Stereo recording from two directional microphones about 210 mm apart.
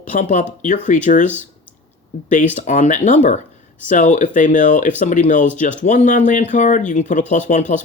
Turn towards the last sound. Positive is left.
turn(degrees=35)  # may be behind; listen again after turning